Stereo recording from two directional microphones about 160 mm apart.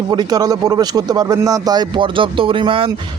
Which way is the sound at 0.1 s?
25° right (ahead or behind).